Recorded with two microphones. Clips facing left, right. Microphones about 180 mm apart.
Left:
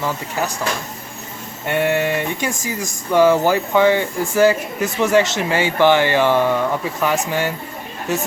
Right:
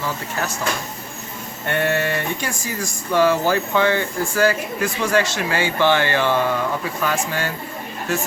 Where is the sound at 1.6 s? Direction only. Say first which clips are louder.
Left 3 dB; 10° left (ahead or behind).